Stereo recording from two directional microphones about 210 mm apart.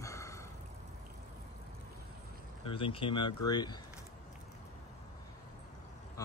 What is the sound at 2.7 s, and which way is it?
Speech, 25° left (ahead or behind).